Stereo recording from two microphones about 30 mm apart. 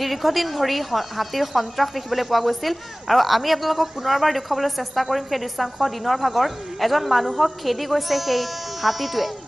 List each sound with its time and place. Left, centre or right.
0.0 s a woman's voice: centre